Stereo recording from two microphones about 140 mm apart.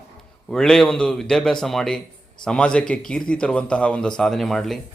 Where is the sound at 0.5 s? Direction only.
5° left (ahead or behind).